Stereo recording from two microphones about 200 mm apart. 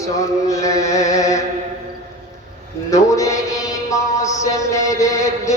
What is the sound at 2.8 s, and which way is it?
A man's voice, 15° left (ahead or behind).